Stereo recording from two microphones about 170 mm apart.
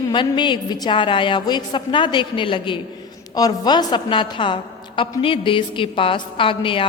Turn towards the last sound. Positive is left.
turn(degrees=30)  # may be behind; listen again after turning